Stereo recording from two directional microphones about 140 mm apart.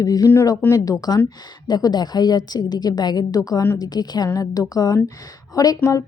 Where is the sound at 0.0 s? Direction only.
25° left (ahead or behind).